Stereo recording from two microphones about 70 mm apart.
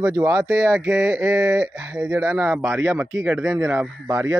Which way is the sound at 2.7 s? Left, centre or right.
Right.